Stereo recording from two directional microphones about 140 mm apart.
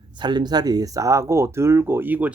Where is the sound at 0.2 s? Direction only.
30° right (ahead or behind).